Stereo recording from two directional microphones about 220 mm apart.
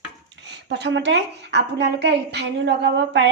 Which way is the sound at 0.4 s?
50° right (ahead or behind).